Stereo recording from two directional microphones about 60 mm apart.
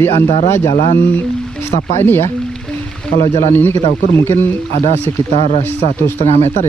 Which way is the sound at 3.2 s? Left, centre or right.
Left.